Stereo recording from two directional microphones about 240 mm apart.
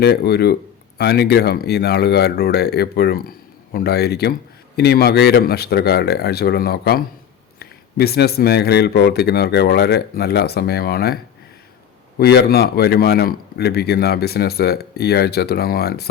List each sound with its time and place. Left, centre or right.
0.0 s speech: left
12.2 s speech: left